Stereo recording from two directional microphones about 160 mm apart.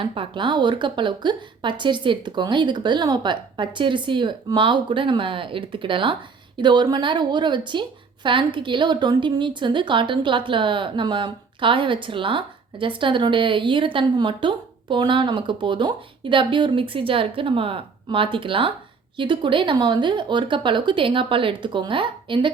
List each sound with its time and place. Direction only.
0.0 s a woman's voice: 35° right (ahead or behind)